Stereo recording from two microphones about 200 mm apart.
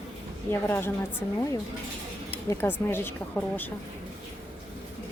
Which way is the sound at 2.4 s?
10° left (ahead or behind).